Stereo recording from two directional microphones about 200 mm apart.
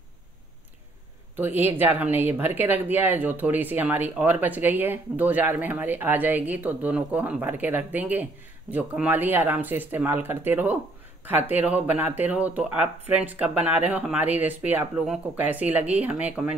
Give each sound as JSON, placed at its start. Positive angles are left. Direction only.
{"t": 1.3, "sound": "speech", "side_deg": -10}